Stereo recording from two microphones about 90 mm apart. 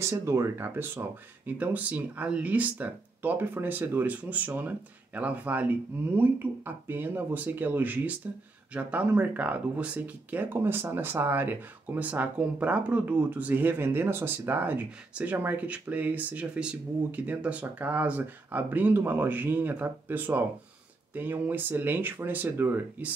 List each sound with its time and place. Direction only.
0.0 s speech: 35° right (ahead or behind)